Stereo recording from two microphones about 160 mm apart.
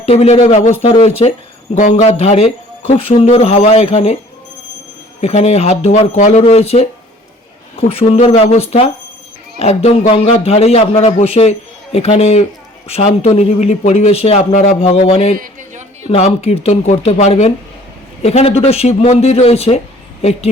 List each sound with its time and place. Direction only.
0.0 s a man's voice: 40° left (ahead or behind)
1.7 s a man's voice: 45° left (ahead or behind)
5.2 s a man's voice: 40° left (ahead or behind)
6.1 s speech: 50° left (ahead or behind)
6.4 s a man's voice: 40° left (ahead or behind)